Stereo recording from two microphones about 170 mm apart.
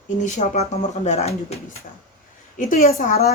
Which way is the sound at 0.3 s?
40° left (ahead or behind).